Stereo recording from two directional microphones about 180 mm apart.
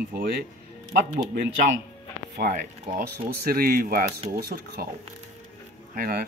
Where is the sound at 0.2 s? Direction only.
55° right (ahead or behind).